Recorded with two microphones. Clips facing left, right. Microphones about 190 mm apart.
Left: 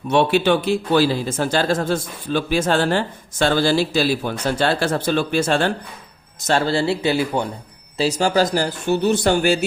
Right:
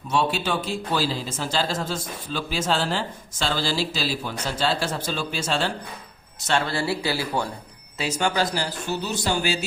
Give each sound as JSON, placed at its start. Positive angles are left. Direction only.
{"t": 0.1, "sound": "speech", "side_deg": 65}
{"t": 6.5, "sound": "speech", "side_deg": 30}
{"t": 7.9, "sound": "speech", "side_deg": 35}